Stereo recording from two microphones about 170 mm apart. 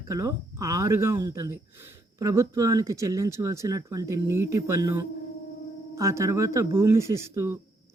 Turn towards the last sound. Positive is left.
turn(degrees=-15)  # may be behind; listen again after turning